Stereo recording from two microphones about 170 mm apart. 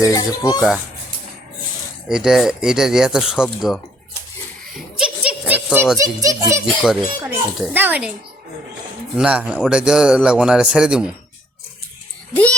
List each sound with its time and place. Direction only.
0.0 s speech: 20° left (ahead or behind)
2.0 s a man's voice: 5° right (ahead or behind)
4.9 s a sound: 5° right (ahead or behind)
6.0 s a child's voice: 20° right (ahead or behind)
6.8 s a man's voice: centre (ahead or behind)
9.1 s a man's voice: 5° right (ahead or behind)
12.3 s speech: 10° left (ahead or behind)